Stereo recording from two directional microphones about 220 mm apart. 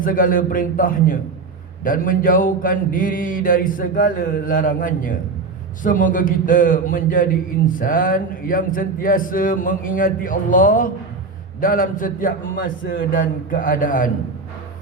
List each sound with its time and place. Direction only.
0.0 s mantra: 40° left (ahead or behind)